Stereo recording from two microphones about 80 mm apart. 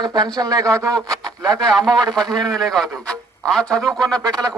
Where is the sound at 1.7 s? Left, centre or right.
Centre.